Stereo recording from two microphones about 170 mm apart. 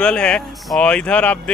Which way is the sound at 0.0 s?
5° left (ahead or behind).